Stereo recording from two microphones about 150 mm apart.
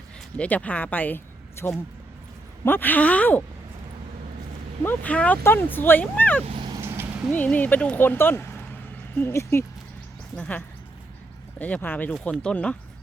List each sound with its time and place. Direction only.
0.3 s speech: 10° left (ahead or behind)
4.8 s speech: 10° left (ahead or behind)
6.4 s vehicle: 40° right (ahead or behind)
6.7 s vehicle: 15° right (ahead or behind)
7.3 s speech: 10° left (ahead or behind)
11.6 s speech: 10° left (ahead or behind)